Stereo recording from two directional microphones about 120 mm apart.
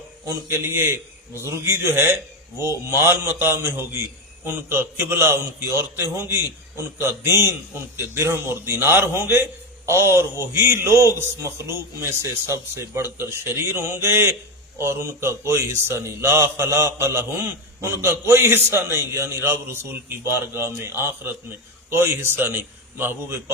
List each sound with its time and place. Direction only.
0.3 s a man's voice: 20° right (ahead or behind)